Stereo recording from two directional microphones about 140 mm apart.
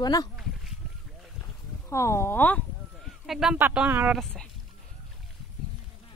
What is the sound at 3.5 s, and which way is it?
Speech, 10° right (ahead or behind).